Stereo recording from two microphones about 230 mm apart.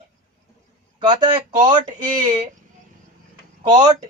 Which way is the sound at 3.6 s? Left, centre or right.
Centre.